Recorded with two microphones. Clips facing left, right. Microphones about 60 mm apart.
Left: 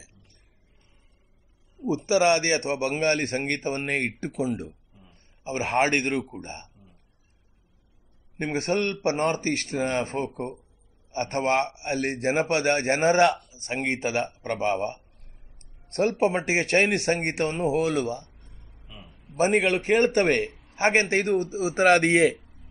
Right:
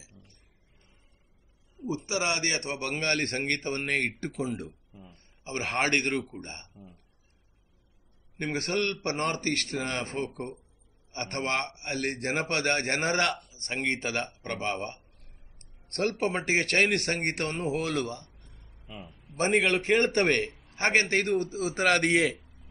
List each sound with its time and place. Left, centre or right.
1.8 s a man's voice: left
3.0 s a man's voice: centre
8.4 s a man's voice: centre
19.3 s a man's voice: centre